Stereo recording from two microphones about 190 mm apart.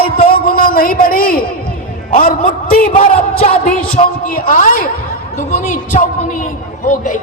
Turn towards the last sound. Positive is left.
turn(degrees=45)  # may be behind; listen again after turning